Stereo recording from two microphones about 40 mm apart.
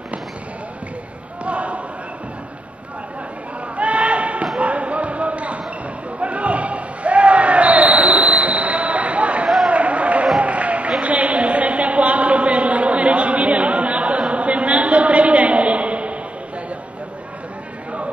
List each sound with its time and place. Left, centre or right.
1.4 s basketball bounce: right
3.7 s sheep: right
4.6 s basketball bounce: right
9.7 s a sound: right